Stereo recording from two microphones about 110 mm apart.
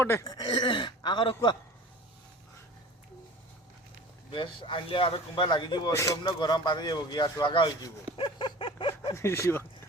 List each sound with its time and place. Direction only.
0.0 s speech: 25° left (ahead or behind)
0.3 s speech: 40° left (ahead or behind)
4.3 s speech: 50° left (ahead or behind)
5.9 s speech: 30° left (ahead or behind)
6.2 s speech: 40° left (ahead or behind)
8.1 s a sound: 50° left (ahead or behind)
9.1 s speech: 25° left (ahead or behind)